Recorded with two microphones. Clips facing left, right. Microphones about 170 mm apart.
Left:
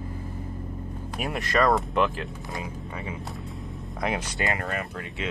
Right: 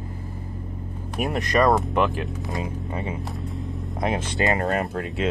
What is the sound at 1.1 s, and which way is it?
Speech, 20° right (ahead or behind).